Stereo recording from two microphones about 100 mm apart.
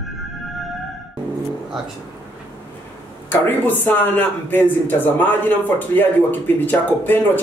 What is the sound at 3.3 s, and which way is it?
Speech, 20° left (ahead or behind).